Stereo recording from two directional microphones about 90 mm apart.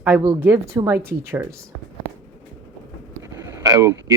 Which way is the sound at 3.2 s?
35° right (ahead or behind).